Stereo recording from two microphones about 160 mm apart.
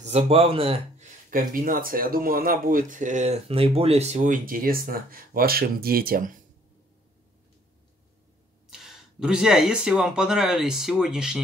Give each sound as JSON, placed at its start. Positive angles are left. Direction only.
{"t": 0.0, "sound": "speech", "side_deg": -40}
{"t": 1.3, "sound": "speech", "side_deg": -60}
{"t": 8.6, "sound": "speech", "side_deg": -5}